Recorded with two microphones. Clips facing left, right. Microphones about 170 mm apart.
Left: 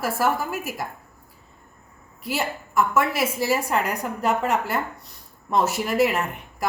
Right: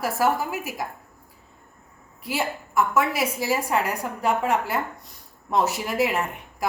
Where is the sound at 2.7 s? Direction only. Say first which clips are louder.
Left 1 dB; 15° right (ahead or behind).